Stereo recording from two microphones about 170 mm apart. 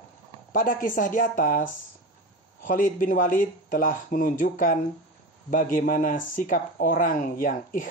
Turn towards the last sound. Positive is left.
turn(degrees=55)  # may be behind; listen again after turning